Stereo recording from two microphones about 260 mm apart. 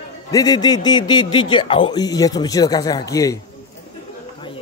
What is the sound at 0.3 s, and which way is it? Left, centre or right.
A man's voice, centre.